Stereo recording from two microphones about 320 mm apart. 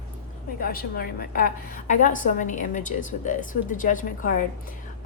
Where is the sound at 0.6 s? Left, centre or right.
Left.